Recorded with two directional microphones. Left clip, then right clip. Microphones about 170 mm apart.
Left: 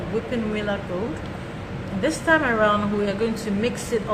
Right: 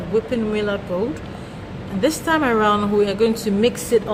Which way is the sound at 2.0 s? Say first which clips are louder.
Right 1 dB; 70° right (ahead or behind).